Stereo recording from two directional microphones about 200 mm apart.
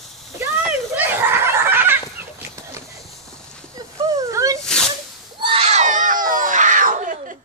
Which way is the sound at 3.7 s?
15° right (ahead or behind).